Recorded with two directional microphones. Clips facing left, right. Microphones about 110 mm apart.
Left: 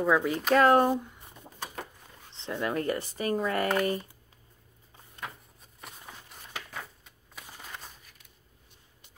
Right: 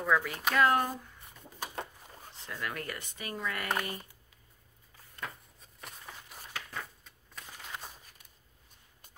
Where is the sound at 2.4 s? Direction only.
25° left (ahead or behind).